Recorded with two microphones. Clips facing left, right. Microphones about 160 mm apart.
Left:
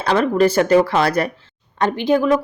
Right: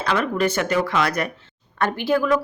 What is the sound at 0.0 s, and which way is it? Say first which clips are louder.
Speech: left 6 dB; 35° left (ahead or behind).